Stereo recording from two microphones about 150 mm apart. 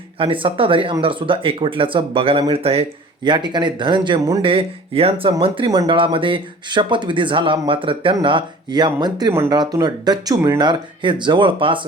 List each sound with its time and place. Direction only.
0.2 s speech: 35° right (ahead or behind)
3.2 s speech: 30° right (ahead or behind)